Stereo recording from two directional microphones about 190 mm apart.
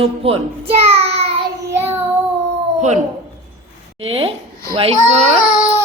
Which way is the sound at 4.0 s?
30° right (ahead or behind).